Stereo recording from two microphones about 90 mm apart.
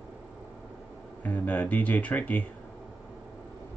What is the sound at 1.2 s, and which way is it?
Speech, 15° left (ahead or behind).